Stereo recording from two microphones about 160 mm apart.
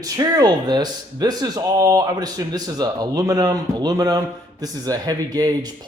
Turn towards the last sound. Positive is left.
turn(degrees=-25)  # may be behind; listen again after turning